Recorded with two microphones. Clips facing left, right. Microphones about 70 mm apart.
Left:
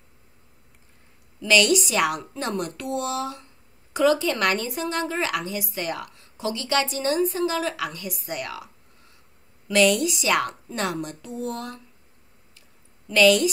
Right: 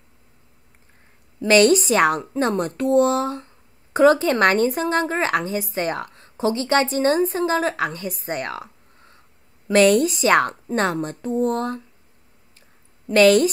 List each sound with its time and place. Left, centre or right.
1.4 s a woman's voice: right
13.0 s a woman's voice: right